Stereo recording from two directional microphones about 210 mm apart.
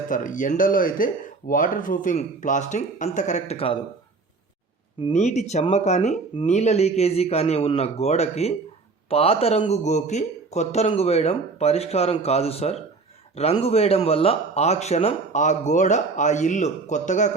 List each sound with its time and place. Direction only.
0.1 s speech: 40° left (ahead or behind)
5.0 s a man's voice: 30° left (ahead or behind)